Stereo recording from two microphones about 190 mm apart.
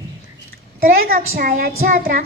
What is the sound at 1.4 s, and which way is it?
Music, 50° right (ahead or behind).